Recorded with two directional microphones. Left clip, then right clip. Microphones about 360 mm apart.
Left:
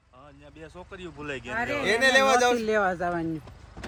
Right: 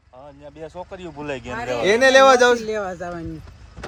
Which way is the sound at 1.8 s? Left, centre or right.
Centre.